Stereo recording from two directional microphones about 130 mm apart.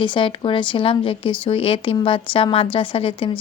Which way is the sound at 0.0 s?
40° left (ahead or behind).